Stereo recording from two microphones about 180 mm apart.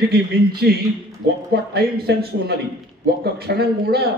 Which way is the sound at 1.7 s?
65° right (ahead or behind).